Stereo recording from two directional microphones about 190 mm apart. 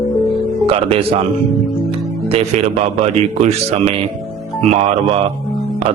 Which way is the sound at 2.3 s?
35° right (ahead or behind).